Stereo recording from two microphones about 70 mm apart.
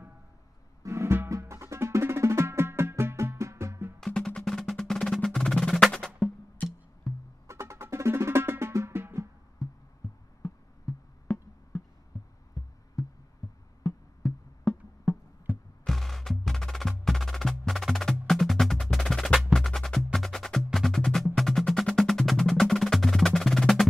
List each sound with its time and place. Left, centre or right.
0.8 s music: right
4.0 s percussion: centre
5.9 s music: centre
7.4 s music: right
9.6 s music: centre
10.0 s a sound: centre
10.4 s music: centre
12.6 s music: centre
13.0 s music: centre
15.5 s music: right
15.8 s music: centre